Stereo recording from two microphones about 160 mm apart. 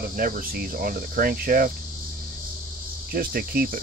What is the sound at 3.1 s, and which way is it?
Speech, 70° right (ahead or behind).